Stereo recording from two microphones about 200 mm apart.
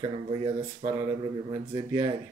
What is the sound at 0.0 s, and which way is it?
Speech, 25° right (ahead or behind).